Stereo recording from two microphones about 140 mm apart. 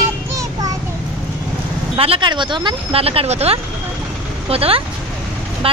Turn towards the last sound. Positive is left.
turn(degrees=-40)  # may be behind; listen again after turning